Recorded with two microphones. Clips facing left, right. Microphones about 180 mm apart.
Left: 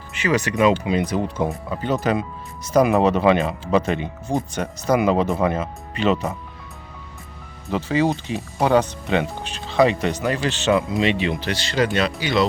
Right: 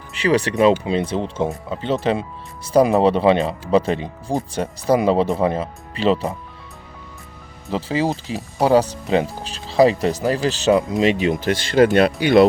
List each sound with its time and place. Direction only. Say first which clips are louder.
0.1 s speech: right 3 dB; 35° right (ahead or behind)
7.7 s speech: left 1 dB; 30° right (ahead or behind); by 12.5 s 55° right (ahead or behind)